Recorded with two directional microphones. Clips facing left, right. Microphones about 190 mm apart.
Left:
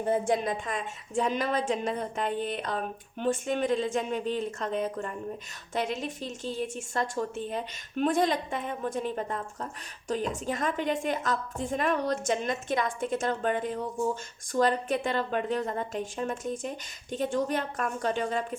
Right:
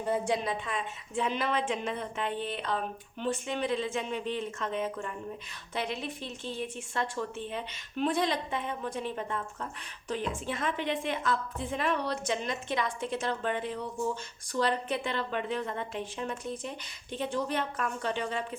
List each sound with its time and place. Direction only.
0.0 s a woman's voice: 50° left (ahead or behind)